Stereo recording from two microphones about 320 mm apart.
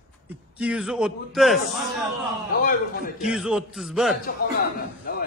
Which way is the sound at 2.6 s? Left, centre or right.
Left.